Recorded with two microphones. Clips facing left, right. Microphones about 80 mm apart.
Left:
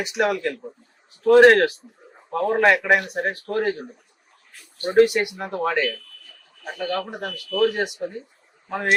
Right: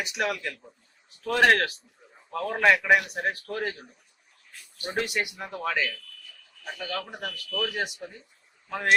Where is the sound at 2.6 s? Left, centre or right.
Centre.